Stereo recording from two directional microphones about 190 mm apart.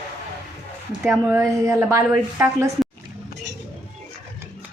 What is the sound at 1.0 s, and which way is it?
A woman's voice, 10° right (ahead or behind).